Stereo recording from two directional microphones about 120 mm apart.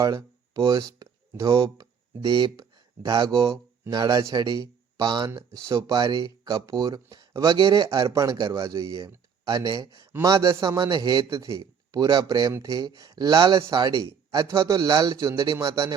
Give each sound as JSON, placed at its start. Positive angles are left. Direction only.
{"t": 0.0, "sound": "a man's voice", "side_deg": -30}